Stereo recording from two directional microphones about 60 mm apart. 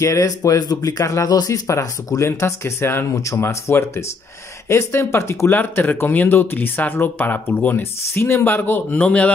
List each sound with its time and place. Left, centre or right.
0.0 s speech: left
3.1 s speech: left
3.4 s speech: left
5.6 s speech: left
9.0 s speech: left